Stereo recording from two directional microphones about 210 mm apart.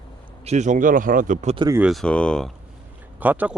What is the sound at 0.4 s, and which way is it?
A man's voice, 35° right (ahead or behind).